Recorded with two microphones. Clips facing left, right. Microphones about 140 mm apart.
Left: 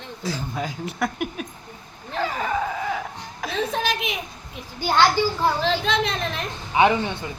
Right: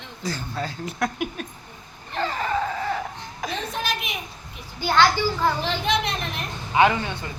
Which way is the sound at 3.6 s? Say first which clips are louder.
Left 8 dB; 90° left.